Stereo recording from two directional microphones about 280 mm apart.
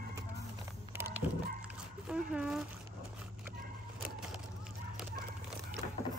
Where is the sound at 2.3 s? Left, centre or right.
Centre.